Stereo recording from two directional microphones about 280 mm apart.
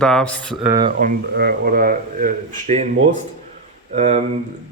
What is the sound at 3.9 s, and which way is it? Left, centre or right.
Speech, right.